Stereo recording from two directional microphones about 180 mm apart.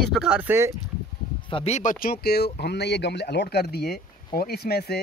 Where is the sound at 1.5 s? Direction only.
35° left (ahead or behind).